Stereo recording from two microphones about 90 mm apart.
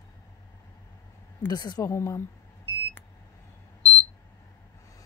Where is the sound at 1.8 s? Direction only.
35° left (ahead or behind).